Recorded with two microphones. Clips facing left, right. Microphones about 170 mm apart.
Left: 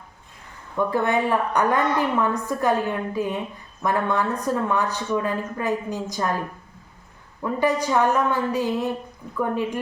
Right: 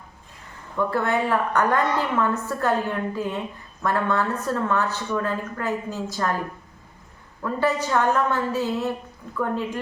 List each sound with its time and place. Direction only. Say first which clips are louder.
0.8 s a woman's voice: left 1 dB; 15° left (ahead or behind)
7.4 s a woman's voice: left 2 dB; 15° left (ahead or behind)